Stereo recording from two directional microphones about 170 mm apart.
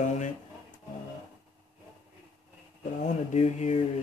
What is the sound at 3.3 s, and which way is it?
Speech, 40° left (ahead or behind).